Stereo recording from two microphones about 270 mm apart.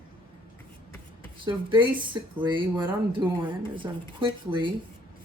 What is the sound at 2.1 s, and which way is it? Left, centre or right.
Speech, centre.